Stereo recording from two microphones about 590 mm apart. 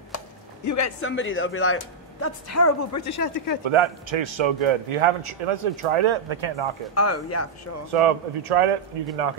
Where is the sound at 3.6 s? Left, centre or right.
Right.